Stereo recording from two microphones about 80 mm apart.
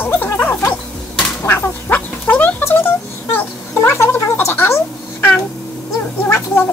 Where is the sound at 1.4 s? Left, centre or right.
Left.